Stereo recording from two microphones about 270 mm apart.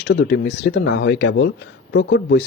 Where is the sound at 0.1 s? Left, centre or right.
Left.